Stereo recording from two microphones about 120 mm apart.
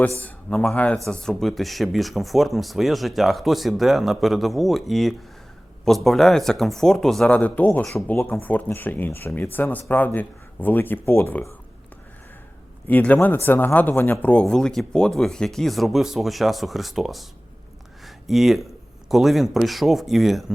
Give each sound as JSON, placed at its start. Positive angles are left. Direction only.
{"t": 0.2, "sound": "speech", "side_deg": 10}
{"t": 12.9, "sound": "speech", "side_deg": 15}
{"t": 18.0, "sound": "a sound", "side_deg": 0}
{"t": 19.0, "sound": "speech", "side_deg": 0}